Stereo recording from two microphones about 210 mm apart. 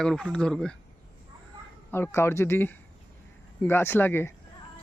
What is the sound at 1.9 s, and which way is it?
Speech, 10° left (ahead or behind).